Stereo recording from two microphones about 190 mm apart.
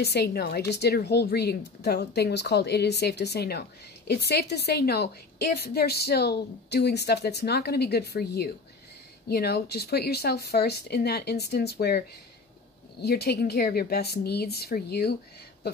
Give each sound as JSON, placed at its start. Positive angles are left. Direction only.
{"t": 0.0, "sound": "a woman's voice", "side_deg": 60}
{"t": 13.0, "sound": "a woman's voice", "side_deg": 55}